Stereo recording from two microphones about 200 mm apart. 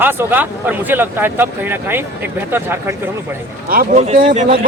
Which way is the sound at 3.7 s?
45° right (ahead or behind).